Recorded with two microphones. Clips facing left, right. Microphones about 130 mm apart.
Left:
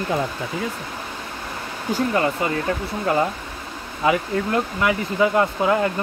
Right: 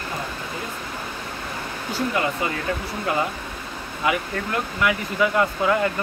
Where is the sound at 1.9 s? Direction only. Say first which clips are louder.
Left 3 dB; 35° left (ahead or behind).